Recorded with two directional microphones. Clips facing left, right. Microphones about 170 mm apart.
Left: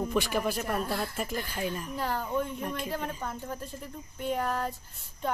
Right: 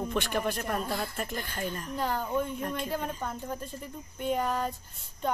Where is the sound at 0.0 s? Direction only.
5° left (ahead or behind).